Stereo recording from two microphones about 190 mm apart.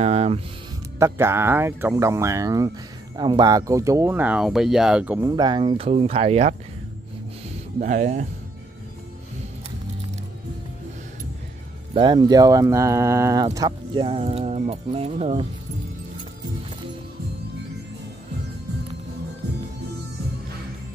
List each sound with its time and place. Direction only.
0.0 s speech: 30° right (ahead or behind)
0.9 s speech: 15° right (ahead or behind)
5.3 s speech: 25° right (ahead or behind)
7.8 s speech: 40° right (ahead or behind)
11.9 s speech: 25° right (ahead or behind)